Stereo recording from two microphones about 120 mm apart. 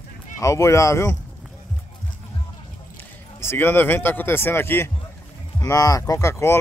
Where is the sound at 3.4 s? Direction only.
20° left (ahead or behind).